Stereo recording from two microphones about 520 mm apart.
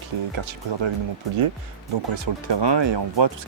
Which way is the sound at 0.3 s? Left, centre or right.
Right.